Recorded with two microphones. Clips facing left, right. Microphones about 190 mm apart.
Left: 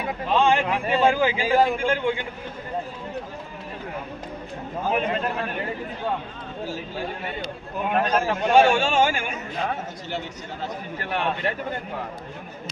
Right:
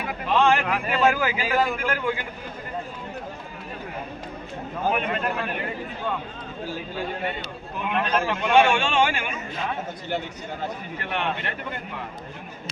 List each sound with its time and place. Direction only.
0.0 s a man's voice: 20° left (ahead or behind)
4.9 s a man's voice: 30° left (ahead or behind)
7.9 s a man's voice: 40° left (ahead or behind)